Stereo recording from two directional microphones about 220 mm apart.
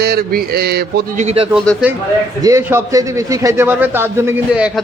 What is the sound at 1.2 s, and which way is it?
Speech, 25° right (ahead or behind).